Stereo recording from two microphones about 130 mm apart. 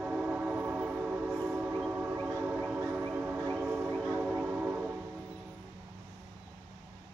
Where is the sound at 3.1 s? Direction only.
15° right (ahead or behind).